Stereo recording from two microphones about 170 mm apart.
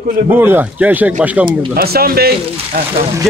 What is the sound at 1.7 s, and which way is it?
Speech, 65° right (ahead or behind).